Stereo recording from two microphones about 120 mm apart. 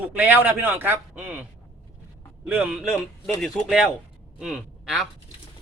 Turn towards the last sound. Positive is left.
turn(degrees=-5)  # may be behind; listen again after turning